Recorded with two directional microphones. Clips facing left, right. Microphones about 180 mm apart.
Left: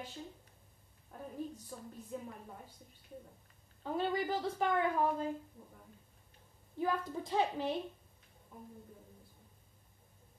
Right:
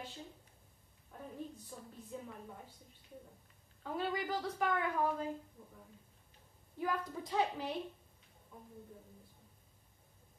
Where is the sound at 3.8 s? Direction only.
25° left (ahead or behind).